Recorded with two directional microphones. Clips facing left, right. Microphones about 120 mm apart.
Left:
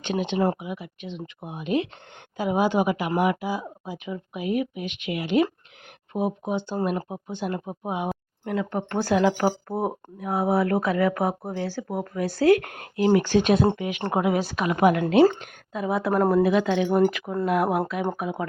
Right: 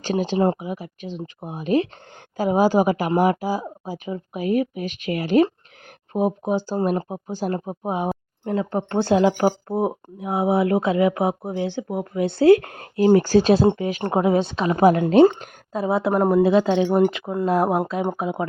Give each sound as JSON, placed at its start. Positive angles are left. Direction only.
{"t": 0.0, "sound": "speech", "side_deg": -35}
{"t": 16.1, "sound": "a woman's voice", "side_deg": -15}
{"t": 16.4, "sound": "speech", "side_deg": -30}